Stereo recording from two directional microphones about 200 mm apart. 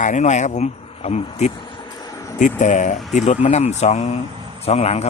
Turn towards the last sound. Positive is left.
turn(degrees=30)  # may be behind; listen again after turning